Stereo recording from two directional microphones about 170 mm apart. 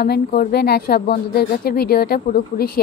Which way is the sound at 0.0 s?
65° left (ahead or behind).